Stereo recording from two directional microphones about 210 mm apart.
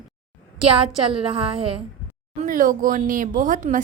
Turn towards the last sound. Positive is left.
turn(degrees=-40)  # may be behind; listen again after turning